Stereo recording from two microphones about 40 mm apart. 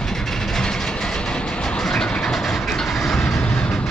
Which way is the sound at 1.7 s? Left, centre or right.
Centre.